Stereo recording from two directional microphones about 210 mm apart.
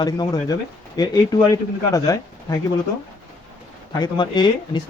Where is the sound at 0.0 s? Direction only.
20° left (ahead or behind).